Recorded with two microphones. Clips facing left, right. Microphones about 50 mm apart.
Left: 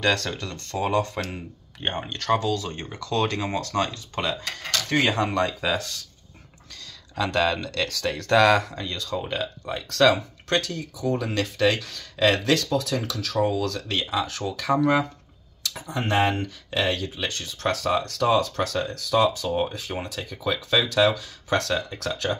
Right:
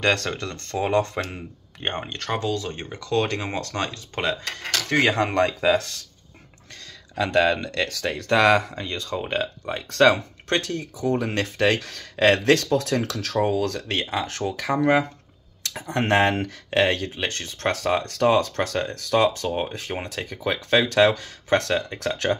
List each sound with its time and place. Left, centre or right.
0.0 s speech: right
7.2 s speech: right
10.5 s speech: right
13.6 s speech: right
14.8 s speech: right
15.9 s speech: right
16.8 s speech: right
17.6 s speech: right
21.5 s speech: right
22.1 s speech: right